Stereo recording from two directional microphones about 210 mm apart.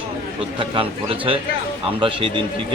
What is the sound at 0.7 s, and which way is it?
Speech, 25° right (ahead or behind).